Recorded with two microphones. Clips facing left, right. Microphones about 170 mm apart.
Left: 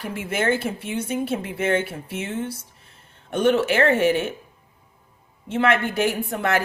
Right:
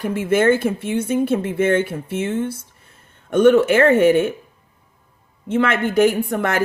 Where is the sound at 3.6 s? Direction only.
50° right (ahead or behind).